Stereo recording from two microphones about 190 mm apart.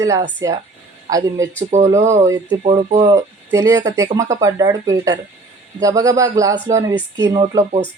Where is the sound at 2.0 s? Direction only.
35° right (ahead or behind).